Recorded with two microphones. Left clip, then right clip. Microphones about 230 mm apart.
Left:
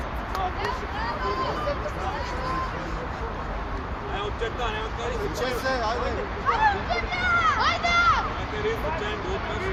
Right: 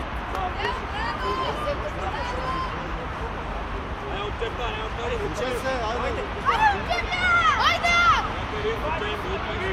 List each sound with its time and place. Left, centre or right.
5.4 s speech: left
6.5 s speech: right